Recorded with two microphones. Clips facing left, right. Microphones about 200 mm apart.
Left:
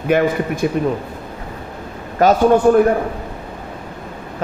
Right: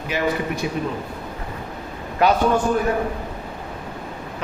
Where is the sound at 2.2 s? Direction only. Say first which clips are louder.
Left 5 dB; 45° left (ahead or behind).